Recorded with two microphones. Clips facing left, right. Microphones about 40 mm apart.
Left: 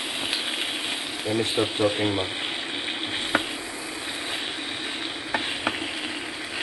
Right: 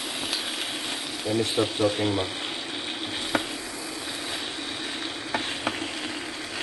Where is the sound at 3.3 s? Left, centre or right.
Left.